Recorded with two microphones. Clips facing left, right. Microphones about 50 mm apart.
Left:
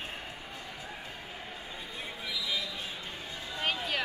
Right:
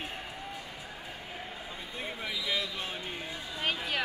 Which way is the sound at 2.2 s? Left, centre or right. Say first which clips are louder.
Right 1 dB; right.